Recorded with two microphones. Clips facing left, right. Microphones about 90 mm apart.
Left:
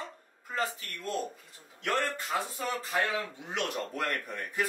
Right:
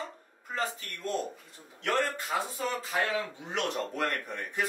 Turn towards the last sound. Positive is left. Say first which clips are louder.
# right 1 dB
turn(degrees=0)  # may be behind; listen again after turning